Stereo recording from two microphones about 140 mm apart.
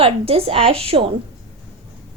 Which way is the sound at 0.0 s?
45° right (ahead or behind).